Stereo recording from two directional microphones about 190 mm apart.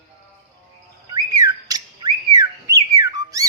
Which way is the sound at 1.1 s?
20° right (ahead or behind).